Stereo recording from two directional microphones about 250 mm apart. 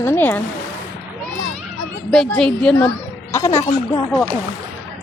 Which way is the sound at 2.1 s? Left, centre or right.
Centre.